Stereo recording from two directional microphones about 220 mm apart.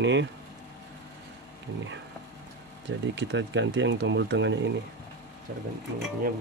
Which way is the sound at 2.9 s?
55° right (ahead or behind).